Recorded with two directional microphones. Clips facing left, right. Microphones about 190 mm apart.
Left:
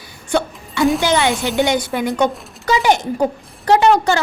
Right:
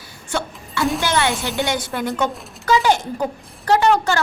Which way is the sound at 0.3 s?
15° left (ahead or behind).